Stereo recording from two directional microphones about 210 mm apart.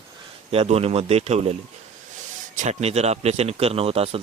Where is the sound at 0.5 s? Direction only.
30° right (ahead or behind).